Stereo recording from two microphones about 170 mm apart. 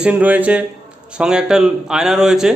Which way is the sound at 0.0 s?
10° right (ahead or behind).